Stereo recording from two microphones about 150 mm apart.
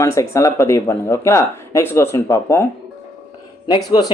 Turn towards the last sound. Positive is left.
turn(degrees=30)  # may be behind; listen again after turning